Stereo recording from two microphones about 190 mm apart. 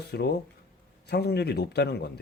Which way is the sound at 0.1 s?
60° left (ahead or behind).